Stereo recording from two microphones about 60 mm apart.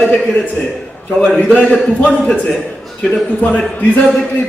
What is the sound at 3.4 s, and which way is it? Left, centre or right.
Speech, left.